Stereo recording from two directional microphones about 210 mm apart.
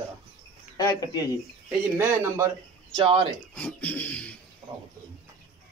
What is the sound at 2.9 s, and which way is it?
Speech, 25° right (ahead or behind).